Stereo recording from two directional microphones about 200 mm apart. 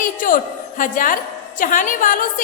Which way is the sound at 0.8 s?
40° left (ahead or behind).